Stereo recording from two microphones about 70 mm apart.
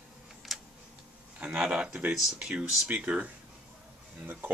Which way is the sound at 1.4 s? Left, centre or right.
Centre.